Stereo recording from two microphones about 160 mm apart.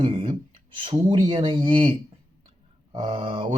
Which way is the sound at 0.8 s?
30° right (ahead or behind).